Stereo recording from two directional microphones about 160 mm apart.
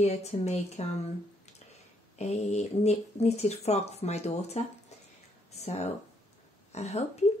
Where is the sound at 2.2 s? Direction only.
45° left (ahead or behind).